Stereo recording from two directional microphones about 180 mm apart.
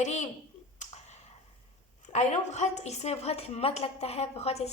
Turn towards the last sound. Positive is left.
turn(degrees=35)  # may be behind; listen again after turning